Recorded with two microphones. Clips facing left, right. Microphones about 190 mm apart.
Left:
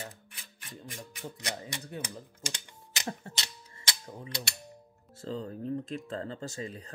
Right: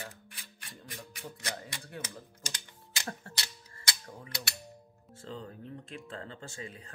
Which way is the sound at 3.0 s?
20° left (ahead or behind).